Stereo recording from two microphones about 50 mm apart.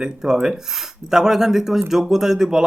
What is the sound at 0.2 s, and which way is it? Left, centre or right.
A man's voice, centre.